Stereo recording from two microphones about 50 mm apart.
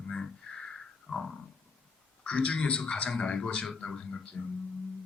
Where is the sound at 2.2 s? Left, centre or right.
Left.